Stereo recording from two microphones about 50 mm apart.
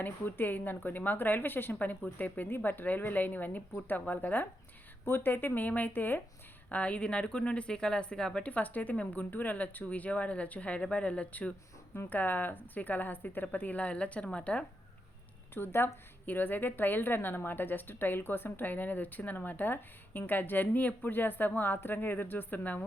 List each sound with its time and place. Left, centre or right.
0.3 s a woman's voice: left
6.7 s speech: left
8.4 s a woman's voice: left
15.5 s a woman's voice: left